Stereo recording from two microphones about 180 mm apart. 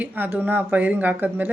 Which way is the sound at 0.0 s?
10° right (ahead or behind).